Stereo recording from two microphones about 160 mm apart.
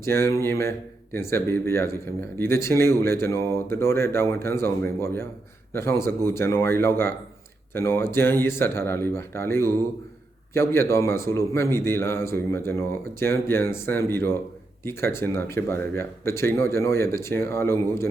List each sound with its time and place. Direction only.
0.0 s a man's voice: 15° left (ahead or behind)